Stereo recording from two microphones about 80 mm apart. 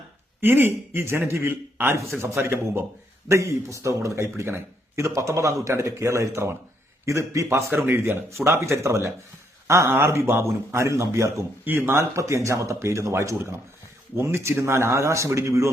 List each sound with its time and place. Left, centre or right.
0.4 s a man's voice: right